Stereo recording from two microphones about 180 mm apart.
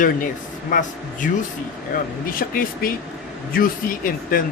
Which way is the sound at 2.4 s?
50° left (ahead or behind).